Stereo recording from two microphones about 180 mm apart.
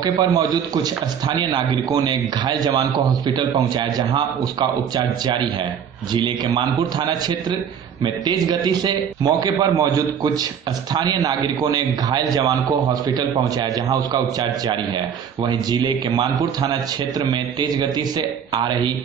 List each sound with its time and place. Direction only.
0.0 s a man's voice: 20° right (ahead or behind)